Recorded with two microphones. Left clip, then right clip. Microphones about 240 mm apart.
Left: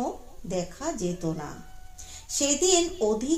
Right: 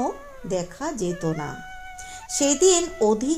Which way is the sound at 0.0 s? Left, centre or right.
Right.